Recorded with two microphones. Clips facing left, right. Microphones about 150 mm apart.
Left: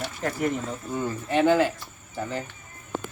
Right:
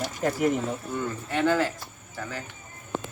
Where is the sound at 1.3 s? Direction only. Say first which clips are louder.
Left 4 dB; 20° left (ahead or behind).